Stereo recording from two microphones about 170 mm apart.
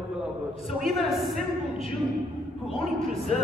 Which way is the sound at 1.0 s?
Centre (ahead or behind).